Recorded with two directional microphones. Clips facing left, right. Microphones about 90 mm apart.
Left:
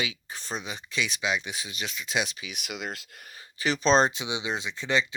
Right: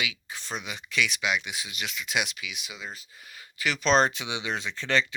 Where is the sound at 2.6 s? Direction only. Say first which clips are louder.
Left 5 dB; 65° left (ahead or behind).